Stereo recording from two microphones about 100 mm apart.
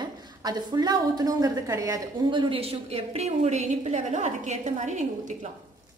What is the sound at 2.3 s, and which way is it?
Speech, 50° right (ahead or behind).